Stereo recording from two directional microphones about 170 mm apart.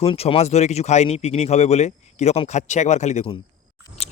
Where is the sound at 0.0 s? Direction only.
35° left (ahead or behind).